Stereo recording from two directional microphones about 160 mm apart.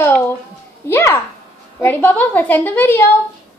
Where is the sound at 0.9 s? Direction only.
15° left (ahead or behind).